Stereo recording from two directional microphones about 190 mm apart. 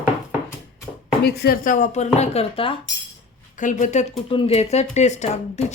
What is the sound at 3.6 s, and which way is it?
Speech, 40° left (ahead or behind).